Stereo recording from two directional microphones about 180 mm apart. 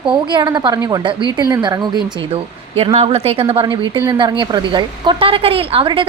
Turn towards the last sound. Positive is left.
turn(degrees=-25)  # may be behind; listen again after turning